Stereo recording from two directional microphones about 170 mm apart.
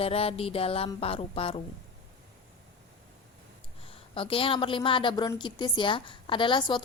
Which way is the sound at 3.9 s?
30° left (ahead or behind).